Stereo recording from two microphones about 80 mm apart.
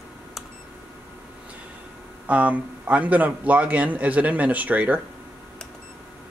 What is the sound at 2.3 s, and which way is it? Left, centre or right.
Speech, centre.